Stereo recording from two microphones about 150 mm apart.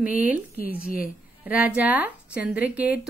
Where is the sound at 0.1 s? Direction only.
65° left (ahead or behind).